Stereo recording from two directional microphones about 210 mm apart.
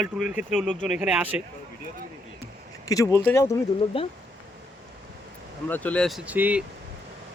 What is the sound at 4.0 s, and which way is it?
Speech, 25° left (ahead or behind).